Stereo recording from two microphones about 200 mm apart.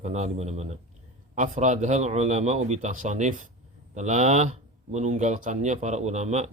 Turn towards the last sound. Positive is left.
turn(degrees=-35)  # may be behind; listen again after turning